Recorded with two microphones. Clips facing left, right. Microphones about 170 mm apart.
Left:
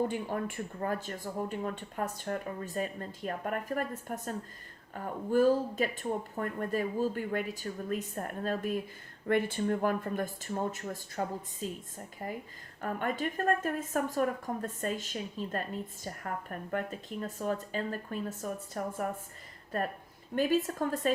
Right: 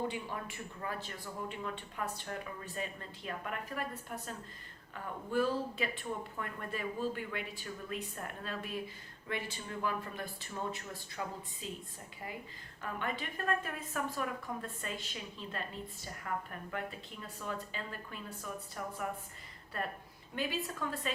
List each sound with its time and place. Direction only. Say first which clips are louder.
0.1 s a woman's voice: left 7 dB; 45° left (ahead or behind)
20.3 s a woman's voice: left 9 dB; 45° left (ahead or behind)